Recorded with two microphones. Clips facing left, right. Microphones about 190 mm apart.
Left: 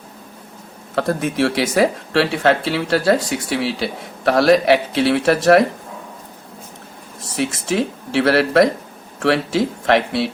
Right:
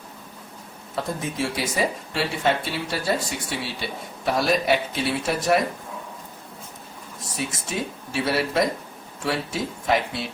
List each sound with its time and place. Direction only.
0.9 s speech: 80° left
7.3 s speech: 80° left